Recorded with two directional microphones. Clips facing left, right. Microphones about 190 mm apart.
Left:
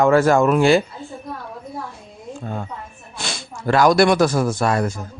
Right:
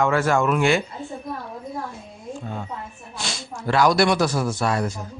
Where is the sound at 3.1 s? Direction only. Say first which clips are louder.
Left 2 dB; 55° left (ahead or behind).